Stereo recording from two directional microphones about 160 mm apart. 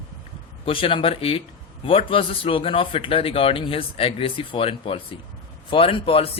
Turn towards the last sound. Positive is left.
turn(degrees=35)  # may be behind; listen again after turning